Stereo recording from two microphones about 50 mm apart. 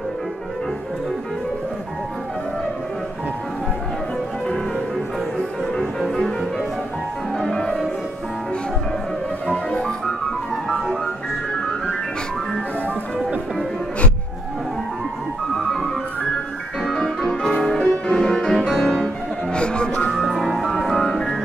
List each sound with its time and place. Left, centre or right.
5.8 s music: centre
7.3 s music: centre
9.5 s music: centre
10.5 s music: centre
16.8 s music: centre
19.5 s music: centre
20.1 s music: centre